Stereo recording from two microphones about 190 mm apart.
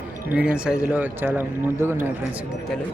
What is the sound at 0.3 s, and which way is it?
Speech, 5° right (ahead or behind).